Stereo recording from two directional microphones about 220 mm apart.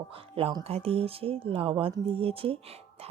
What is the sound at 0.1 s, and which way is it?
Speech, 25° right (ahead or behind).